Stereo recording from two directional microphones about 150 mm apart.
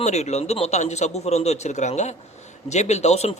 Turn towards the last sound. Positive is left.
turn(degrees=45)  # may be behind; listen again after turning